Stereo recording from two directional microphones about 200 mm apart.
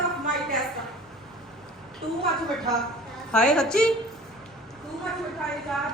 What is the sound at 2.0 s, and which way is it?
Speech, 25° right (ahead or behind).